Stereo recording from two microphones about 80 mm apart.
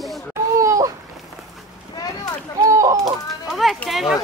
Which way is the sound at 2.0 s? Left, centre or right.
Left.